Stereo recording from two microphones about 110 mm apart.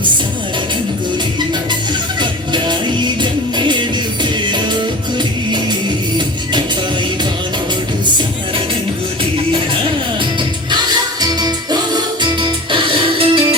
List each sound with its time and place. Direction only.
2.5 s music: 45° right (ahead or behind)
10.7 s music: 35° right (ahead or behind); by 13.6 s 55° right (ahead or behind)